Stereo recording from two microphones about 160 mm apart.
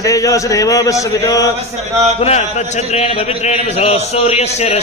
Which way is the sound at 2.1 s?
40° left (ahead or behind).